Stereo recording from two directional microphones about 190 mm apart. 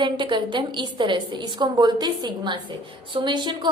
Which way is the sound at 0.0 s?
25° right (ahead or behind).